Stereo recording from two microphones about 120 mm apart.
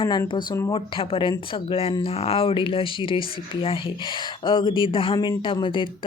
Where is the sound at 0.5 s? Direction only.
30° left (ahead or behind).